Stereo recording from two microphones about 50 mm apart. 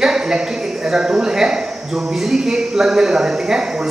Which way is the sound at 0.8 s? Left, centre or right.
Centre.